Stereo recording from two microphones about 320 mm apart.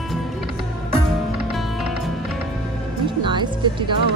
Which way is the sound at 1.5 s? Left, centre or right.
Centre.